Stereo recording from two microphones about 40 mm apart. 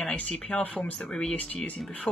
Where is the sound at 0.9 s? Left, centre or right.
Left.